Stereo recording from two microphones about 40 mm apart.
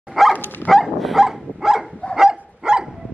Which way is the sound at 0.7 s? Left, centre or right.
Centre.